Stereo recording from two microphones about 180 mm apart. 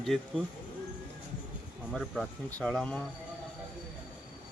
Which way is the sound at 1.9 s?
5° left (ahead or behind).